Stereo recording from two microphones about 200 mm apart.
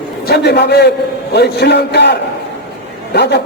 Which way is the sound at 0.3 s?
55° left (ahead or behind).